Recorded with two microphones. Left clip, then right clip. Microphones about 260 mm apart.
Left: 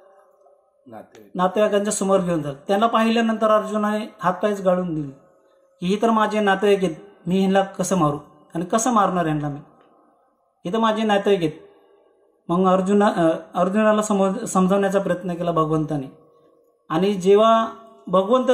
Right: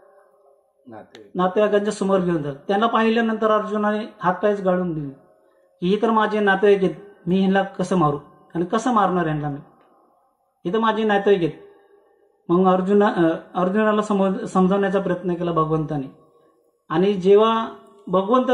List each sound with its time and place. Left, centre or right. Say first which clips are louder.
1.3 s speech: even; left
10.6 s speech: right 1 dB; left
12.4 s a man's voice: right 1 dB; left